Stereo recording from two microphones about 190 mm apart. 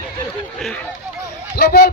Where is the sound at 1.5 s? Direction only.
55° left (ahead or behind).